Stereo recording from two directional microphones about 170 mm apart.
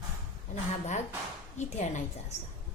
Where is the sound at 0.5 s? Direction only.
45° left (ahead or behind).